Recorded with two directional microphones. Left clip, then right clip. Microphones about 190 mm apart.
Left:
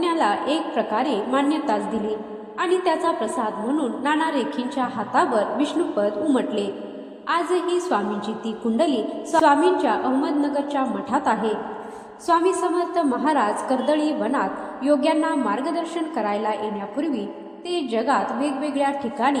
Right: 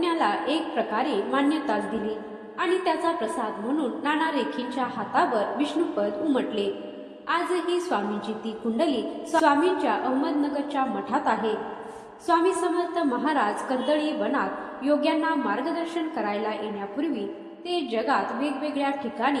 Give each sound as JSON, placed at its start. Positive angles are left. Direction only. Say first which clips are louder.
{"t": 0.0, "sound": "a woman's voice", "louder": "left 3 dB", "side_deg": 30}
{"t": 9.3, "sound": "a woman's voice", "louder": "left 4 dB", "side_deg": 30}
{"t": 17.7, "sound": "a woman's voice", "louder": "left 3 dB", "side_deg": 30}